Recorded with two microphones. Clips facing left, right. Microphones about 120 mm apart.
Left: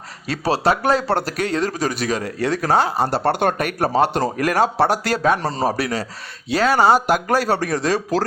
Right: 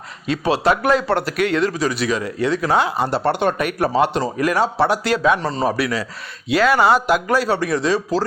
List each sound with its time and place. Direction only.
0.3 s speech: 35° left (ahead or behind)